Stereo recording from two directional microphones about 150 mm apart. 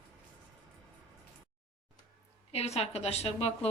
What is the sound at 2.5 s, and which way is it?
A woman's voice, 45° left (ahead or behind).